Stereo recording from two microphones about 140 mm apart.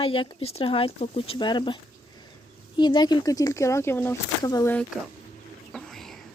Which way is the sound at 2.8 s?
30° left (ahead or behind).